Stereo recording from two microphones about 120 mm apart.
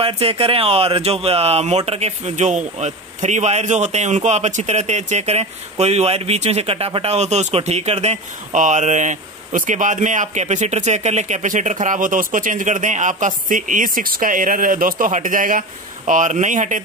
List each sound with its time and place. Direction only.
0.0 s speech: 50° right (ahead or behind); by 13.8 s 90° right
15.0 s speech: 90° right